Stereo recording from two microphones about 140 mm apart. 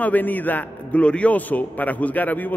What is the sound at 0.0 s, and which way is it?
A man's voice, 10° left (ahead or behind).